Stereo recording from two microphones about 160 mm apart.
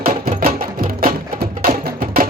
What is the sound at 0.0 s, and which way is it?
Music, 65° right (ahead or behind).